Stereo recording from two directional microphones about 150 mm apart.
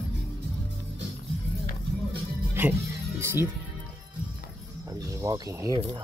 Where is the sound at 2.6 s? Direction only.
15° right (ahead or behind).